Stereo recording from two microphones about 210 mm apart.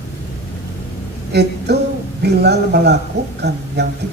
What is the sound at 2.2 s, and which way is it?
Speech, 50° right (ahead or behind).